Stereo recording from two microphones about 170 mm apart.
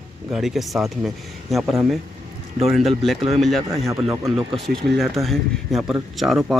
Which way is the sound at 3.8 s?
15° right (ahead or behind).